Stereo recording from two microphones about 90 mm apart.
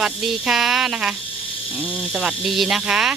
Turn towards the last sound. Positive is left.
turn(degrees=-10)  # may be behind; listen again after turning